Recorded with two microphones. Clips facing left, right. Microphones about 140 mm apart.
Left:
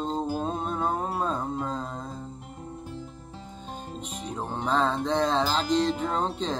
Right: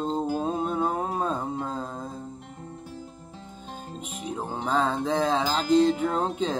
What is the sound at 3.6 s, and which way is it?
Music, 5° right (ahead or behind).